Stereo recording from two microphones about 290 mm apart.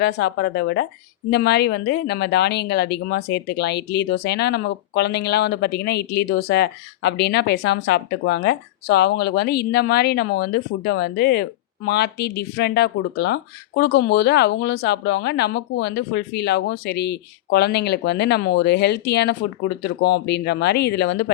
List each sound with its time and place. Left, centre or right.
0.0 s speech: left